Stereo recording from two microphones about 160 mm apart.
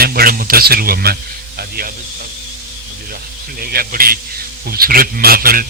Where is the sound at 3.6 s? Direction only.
70° right (ahead or behind).